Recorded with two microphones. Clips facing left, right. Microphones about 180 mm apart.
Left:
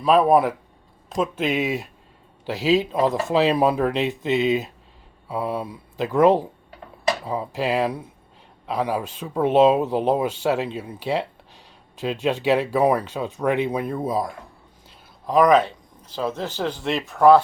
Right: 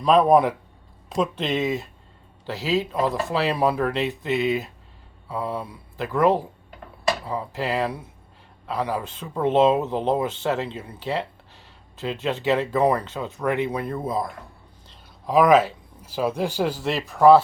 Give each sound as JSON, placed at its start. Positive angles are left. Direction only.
{"t": 0.0, "sound": "speech", "side_deg": 5}
{"t": 14.8, "sound": "speech", "side_deg": 0}